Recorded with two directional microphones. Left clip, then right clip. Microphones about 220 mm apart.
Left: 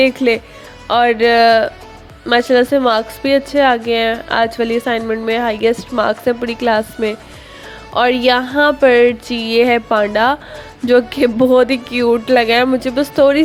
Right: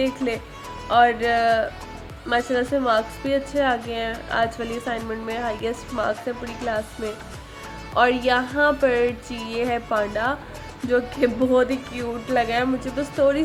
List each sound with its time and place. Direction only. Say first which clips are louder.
0.0 s speech: left 12 dB; 35° left (ahead or behind)